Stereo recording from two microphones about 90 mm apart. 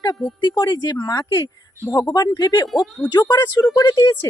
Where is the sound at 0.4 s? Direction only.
50° left (ahead or behind).